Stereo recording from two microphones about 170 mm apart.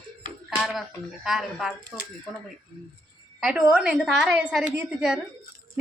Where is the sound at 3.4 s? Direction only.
Centre (ahead or behind).